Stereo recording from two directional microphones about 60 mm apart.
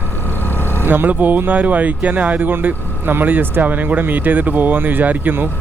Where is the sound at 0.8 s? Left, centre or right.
Right.